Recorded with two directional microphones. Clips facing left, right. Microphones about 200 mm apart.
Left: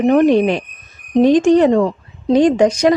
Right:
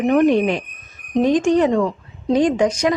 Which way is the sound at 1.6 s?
35° left (ahead or behind).